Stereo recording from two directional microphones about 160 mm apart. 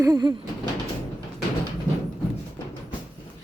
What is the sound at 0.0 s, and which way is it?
Speech, 25° right (ahead or behind).